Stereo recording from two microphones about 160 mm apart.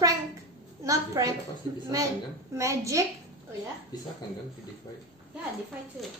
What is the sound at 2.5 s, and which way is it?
Speech, 20° right (ahead or behind).